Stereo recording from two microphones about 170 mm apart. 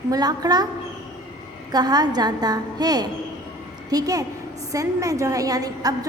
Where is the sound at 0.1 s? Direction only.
25° right (ahead or behind).